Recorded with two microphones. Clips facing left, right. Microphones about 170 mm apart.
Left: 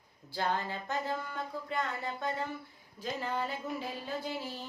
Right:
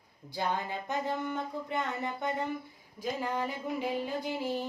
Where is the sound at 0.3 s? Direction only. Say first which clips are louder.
Right 1 dB; 15° right (ahead or behind).